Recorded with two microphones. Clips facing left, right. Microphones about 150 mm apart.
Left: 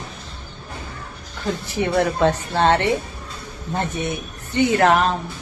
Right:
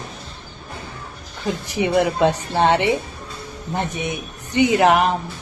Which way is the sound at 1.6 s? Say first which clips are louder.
Right 2 dB; 15° right (ahead or behind).